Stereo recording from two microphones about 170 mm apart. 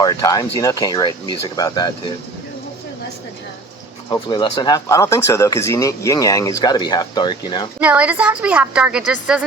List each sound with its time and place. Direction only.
0.0 s speech: 20° left (ahead or behind)
4.1 s speech: 25° left (ahead or behind)
7.8 s a woman's voice: 10° right (ahead or behind)